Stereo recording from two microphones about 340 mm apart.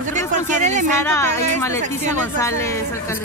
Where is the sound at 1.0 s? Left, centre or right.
Centre.